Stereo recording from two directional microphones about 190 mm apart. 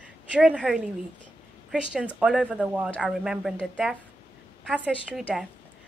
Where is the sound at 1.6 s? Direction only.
5° right (ahead or behind).